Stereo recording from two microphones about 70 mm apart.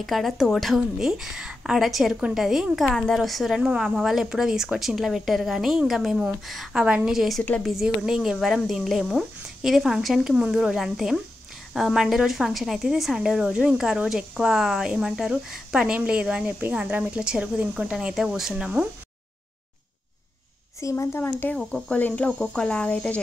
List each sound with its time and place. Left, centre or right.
0.0 s a woman's voice: centre
0.7 s a woman's voice: centre
17.9 s a woman's voice: centre
20.8 s a woman's voice: left
21.5 s a woman's voice: centre
21.9 s speech: left
22.4 s speech: centre